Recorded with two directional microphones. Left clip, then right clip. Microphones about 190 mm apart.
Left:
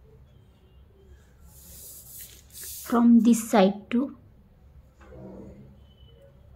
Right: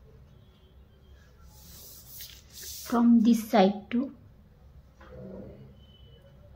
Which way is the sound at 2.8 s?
20° left (ahead or behind).